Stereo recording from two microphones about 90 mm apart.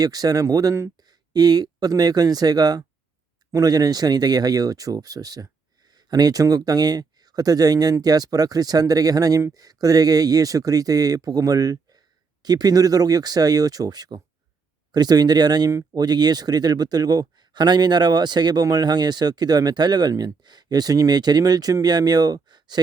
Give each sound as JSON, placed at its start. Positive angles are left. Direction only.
{"t": 0.0, "sound": "speech", "side_deg": -45}